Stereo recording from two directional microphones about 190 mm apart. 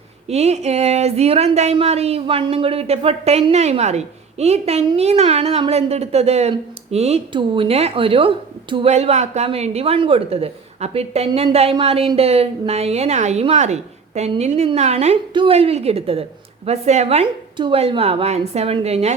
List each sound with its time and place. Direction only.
0.3 s speech: 35° right (ahead or behind)